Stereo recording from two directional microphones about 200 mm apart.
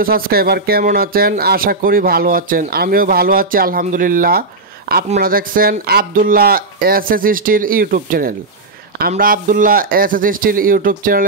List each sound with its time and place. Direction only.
0.0 s speech: 50° right (ahead or behind)